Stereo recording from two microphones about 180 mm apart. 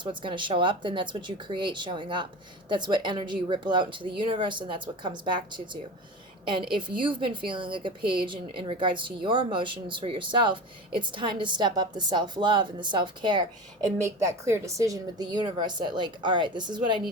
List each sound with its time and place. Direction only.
0.0 s a woman's voice: 25° right (ahead or behind)